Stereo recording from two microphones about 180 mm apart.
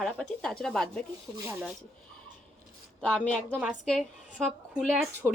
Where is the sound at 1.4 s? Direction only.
10° right (ahead or behind).